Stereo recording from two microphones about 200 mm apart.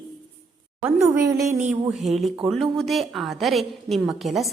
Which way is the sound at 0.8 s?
10° right (ahead or behind).